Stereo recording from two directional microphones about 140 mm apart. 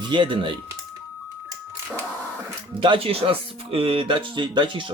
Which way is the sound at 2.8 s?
40° right (ahead or behind).